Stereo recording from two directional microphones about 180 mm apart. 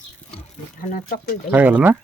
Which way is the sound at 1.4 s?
10° right (ahead or behind).